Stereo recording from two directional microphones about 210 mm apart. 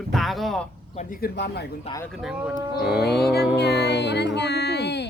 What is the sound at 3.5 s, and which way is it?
Speech, 55° left (ahead or behind).